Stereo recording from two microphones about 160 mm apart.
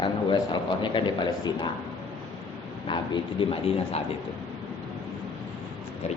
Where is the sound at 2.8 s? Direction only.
30° left (ahead or behind).